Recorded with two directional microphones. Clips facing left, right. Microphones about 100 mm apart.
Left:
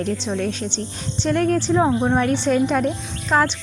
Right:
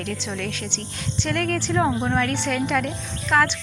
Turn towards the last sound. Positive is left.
turn(degrees=25)  # may be behind; listen again after turning